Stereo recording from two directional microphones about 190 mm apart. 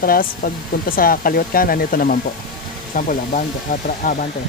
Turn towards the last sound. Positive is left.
turn(degrees=50)  # may be behind; listen again after turning